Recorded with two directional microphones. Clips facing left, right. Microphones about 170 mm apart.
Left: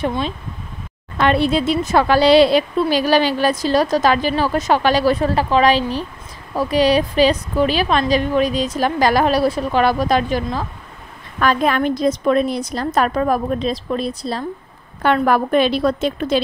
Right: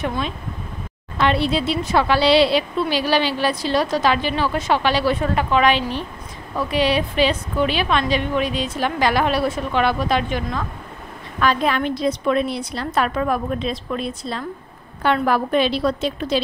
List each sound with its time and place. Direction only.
0.0 s a woman's voice: 30° left (ahead or behind)
1.1 s a woman's voice: 50° left (ahead or behind)
15.0 s speech: 50° left (ahead or behind)